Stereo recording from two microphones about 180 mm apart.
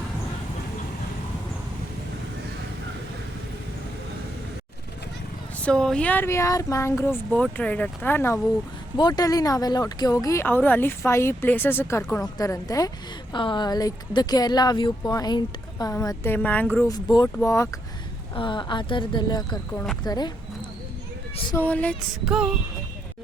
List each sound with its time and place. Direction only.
5.6 s speech: 5° left (ahead or behind)
9.0 s speech: 20° left (ahead or behind)
18.3 s speech: 25° left (ahead or behind)
21.5 s speech: 10° left (ahead or behind)